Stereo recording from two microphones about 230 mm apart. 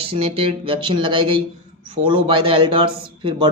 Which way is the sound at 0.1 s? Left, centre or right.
Right.